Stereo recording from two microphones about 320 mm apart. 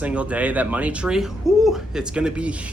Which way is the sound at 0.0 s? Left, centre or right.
Centre.